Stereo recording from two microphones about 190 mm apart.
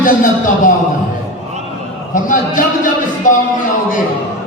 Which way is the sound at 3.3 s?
45° left (ahead or behind).